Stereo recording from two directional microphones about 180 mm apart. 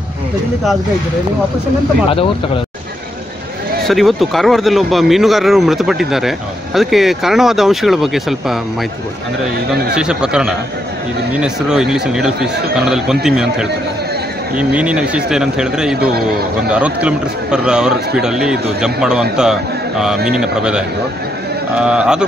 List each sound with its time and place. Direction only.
2.0 s speech: 30° left (ahead or behind)
3.8 s speech: centre (ahead or behind)
9.9 s speech: 5° right (ahead or behind)